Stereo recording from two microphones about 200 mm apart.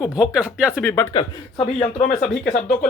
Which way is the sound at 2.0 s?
40° left (ahead or behind).